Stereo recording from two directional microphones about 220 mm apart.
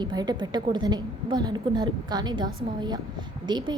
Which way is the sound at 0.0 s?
20° right (ahead or behind).